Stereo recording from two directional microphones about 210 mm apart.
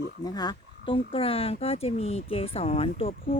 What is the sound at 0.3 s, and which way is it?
Speech, 20° left (ahead or behind).